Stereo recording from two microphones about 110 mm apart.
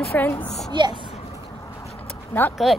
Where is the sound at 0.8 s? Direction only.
45° right (ahead or behind).